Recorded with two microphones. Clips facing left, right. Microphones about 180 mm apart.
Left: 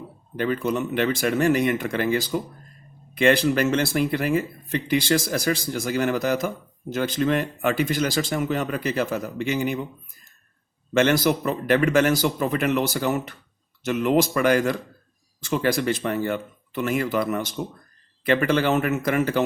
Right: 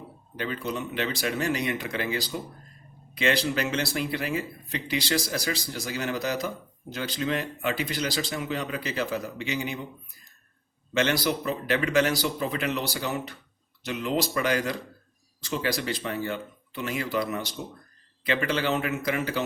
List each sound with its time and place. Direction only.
0.3 s speech: 50° left (ahead or behind)
10.9 s speech: 50° left (ahead or behind)